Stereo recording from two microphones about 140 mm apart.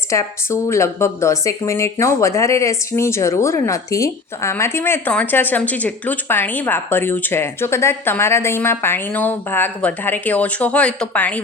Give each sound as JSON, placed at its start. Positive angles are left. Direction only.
{"t": 0.1, "sound": "a woman's voice", "side_deg": 20}